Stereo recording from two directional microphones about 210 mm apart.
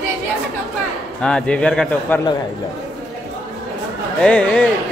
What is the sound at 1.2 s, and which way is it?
A man's voice, 5° left (ahead or behind).